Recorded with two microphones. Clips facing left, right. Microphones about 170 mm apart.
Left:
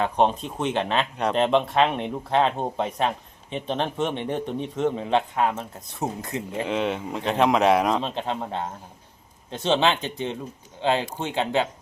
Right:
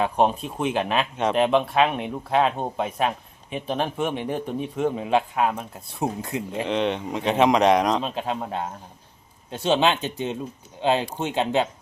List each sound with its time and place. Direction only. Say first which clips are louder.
0.0 s speech: right 1 dB; 10° right (ahead or behind)
6.7 s speech: right 2 dB; 5° left (ahead or behind)
8.0 s speech: right 1 dB; 5° right (ahead or behind)